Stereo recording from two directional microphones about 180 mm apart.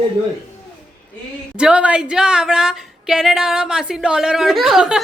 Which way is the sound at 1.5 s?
5° right (ahead or behind).